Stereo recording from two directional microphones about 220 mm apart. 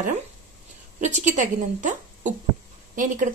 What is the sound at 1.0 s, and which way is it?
Speech, 35° right (ahead or behind).